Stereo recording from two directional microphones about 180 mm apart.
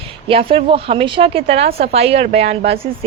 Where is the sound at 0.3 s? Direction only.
30° right (ahead or behind).